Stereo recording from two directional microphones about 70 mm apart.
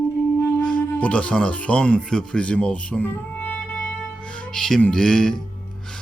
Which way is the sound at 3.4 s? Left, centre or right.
Left.